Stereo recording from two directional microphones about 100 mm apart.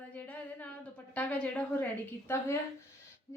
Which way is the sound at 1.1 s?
15° left (ahead or behind).